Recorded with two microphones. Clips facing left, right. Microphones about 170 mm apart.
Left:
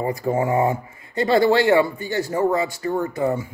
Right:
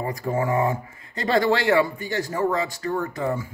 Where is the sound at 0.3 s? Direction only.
25° left (ahead or behind).